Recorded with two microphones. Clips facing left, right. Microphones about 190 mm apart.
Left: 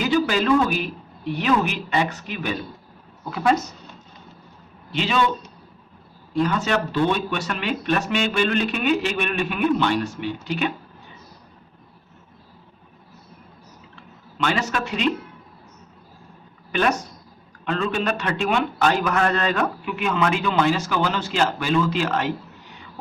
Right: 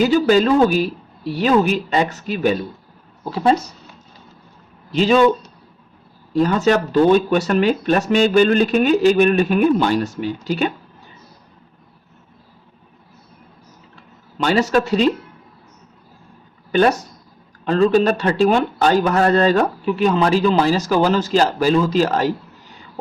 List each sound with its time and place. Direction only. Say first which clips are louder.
0.0 s a man's voice: right 7 dB; 35° right (ahead or behind)
4.9 s a man's voice: right 9 dB; 40° right (ahead or behind)
6.3 s a man's voice: right 6 dB; 40° right (ahead or behind)
13.9 s a sound: right 8 dB; 40° right (ahead or behind)
16.7 s a man's voice: right 6 dB; 35° right (ahead or behind)